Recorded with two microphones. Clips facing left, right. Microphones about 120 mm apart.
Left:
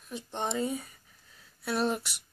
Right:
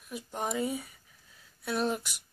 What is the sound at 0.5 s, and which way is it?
Speech, 10° right (ahead or behind).